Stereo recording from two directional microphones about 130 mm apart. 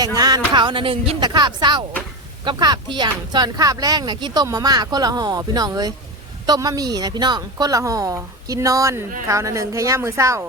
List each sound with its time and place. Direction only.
0.0 s speech: 30° right (ahead or behind)